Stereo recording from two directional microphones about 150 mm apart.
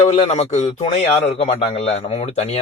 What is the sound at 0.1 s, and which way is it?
Speech, 45° left (ahead or behind).